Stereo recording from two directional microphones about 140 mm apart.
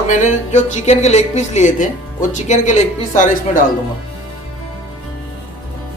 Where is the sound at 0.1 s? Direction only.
60° left (ahead or behind).